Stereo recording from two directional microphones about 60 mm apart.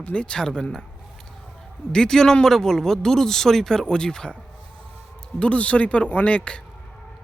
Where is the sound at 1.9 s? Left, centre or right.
Centre.